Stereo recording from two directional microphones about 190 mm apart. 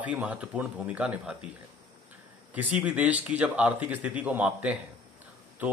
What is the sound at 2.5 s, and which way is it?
Speech, 10° right (ahead or behind).